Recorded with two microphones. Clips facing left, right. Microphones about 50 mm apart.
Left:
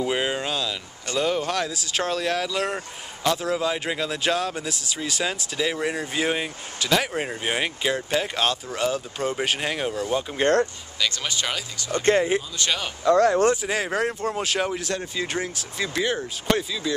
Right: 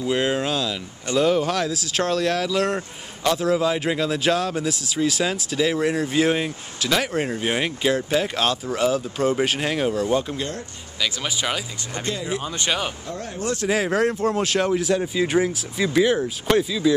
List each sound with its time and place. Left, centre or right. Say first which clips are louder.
0.1 s a sound: right 3 dB; centre
1.1 s speech: right 4 dB; centre
11.9 s speech: left 8 dB; left
12.5 s speech: right 2 dB; centre
13.0 s speech: left 14 dB; left
13.6 s speech: right 4 dB; centre